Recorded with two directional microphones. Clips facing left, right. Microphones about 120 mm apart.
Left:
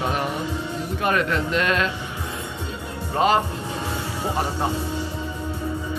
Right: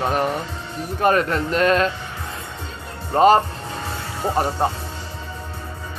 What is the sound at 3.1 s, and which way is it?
Speech, 40° right (ahead or behind).